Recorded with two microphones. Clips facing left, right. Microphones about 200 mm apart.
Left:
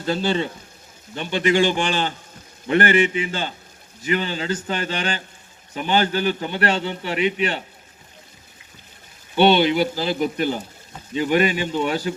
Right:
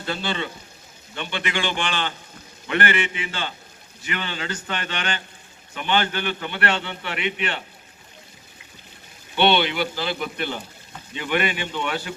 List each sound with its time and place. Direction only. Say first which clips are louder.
0.0 s a man's voice: left 6 dB; 40° left (ahead or behind)
9.3 s a man's voice: left 4 dB; 40° left (ahead or behind)